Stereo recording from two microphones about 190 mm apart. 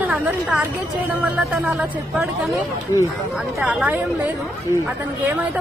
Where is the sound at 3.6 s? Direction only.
5° right (ahead or behind).